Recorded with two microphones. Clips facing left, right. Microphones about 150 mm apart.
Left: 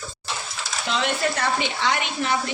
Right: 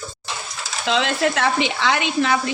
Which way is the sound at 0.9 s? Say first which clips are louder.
Right 4 dB; 90° right.